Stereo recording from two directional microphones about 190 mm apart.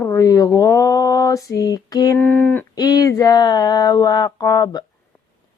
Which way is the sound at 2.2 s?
10° left (ahead or behind).